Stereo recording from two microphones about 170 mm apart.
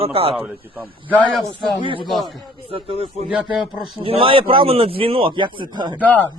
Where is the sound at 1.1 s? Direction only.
Centre (ahead or behind).